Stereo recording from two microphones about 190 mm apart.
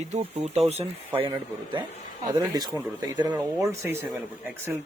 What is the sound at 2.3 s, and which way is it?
Speech, 20° right (ahead or behind).